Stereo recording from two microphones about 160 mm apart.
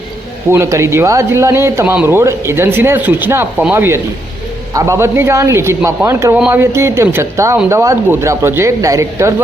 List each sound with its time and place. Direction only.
0.5 s speech: 15° right (ahead or behind)